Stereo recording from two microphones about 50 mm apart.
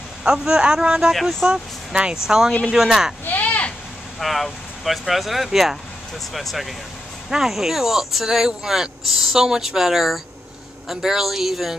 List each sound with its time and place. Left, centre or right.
0.2 s speech: centre
3.3 s a sound: left
4.2 s speech: centre